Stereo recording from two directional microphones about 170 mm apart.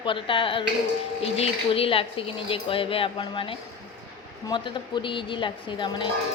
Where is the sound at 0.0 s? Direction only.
30° left (ahead or behind).